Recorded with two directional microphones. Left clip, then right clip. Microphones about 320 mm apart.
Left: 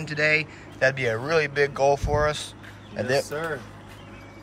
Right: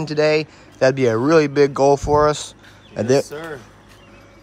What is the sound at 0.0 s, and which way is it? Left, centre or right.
Speech, centre.